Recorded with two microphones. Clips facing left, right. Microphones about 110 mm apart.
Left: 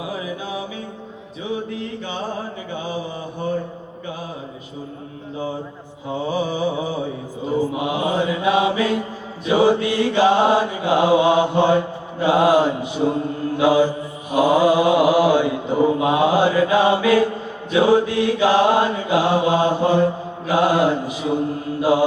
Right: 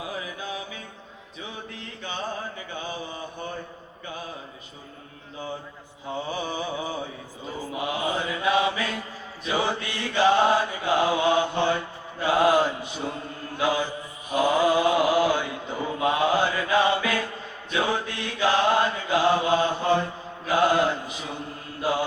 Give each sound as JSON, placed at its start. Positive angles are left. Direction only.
{"t": 0.2, "sound": "mantra", "side_deg": 20}
{"t": 6.1, "sound": "mantra", "side_deg": 20}
{"t": 7.7, "sound": "mantra", "side_deg": 20}
{"t": 13.6, "sound": "chant", "side_deg": 20}
{"t": 14.3, "sound": "mantra", "side_deg": 15}